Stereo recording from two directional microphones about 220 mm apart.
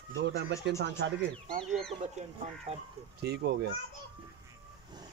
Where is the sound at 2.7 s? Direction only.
25° right (ahead or behind).